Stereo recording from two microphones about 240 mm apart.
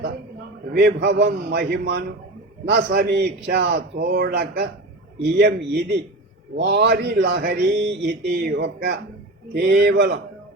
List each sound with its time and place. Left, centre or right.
0.7 s speech: right